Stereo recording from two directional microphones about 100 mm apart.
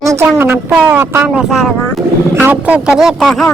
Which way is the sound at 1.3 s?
5° right (ahead or behind).